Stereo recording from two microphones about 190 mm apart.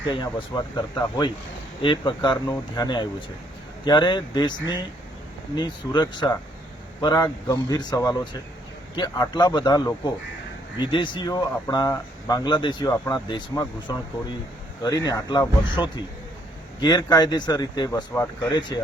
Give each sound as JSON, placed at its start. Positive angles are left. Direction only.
{"t": 0.0, "sound": "speech", "side_deg": 25}